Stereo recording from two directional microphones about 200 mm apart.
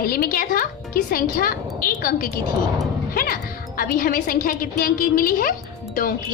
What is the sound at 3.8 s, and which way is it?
A woman's voice, 45° left (ahead or behind).